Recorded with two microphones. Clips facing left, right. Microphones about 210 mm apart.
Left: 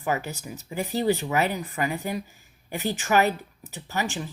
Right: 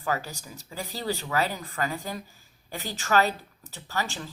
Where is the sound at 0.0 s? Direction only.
20° left (ahead or behind).